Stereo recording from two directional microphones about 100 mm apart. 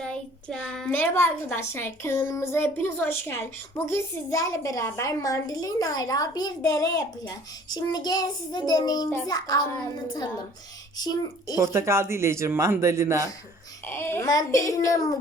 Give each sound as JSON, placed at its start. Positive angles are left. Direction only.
{"t": 0.0, "sound": "child singing", "side_deg": 10}
{"t": 0.9, "sound": "a woman's voice", "side_deg": 25}
{"t": 7.7, "sound": "child singing", "side_deg": 45}
{"t": 9.2, "sound": "a child's voice", "side_deg": 40}
{"t": 10.9, "sound": "a child's voice", "side_deg": 40}
{"t": 11.5, "sound": "speech", "side_deg": -30}
{"t": 13.8, "sound": "a woman's voice", "side_deg": 20}
{"t": 14.3, "sound": "a child's voice", "side_deg": 35}